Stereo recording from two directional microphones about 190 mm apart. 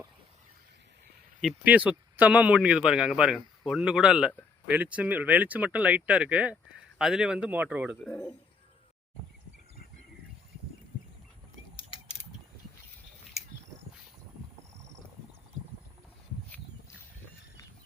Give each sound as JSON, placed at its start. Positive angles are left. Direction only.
{"t": 1.4, "sound": "speech", "side_deg": -5}
{"t": 8.0, "sound": "speech", "side_deg": 5}
{"t": 11.8, "sound": "mechanisms", "side_deg": 30}